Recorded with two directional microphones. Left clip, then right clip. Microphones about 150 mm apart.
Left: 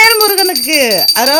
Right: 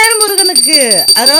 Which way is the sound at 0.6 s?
10° right (ahead or behind).